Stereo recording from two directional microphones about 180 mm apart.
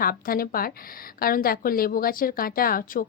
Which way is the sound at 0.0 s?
55° left (ahead or behind).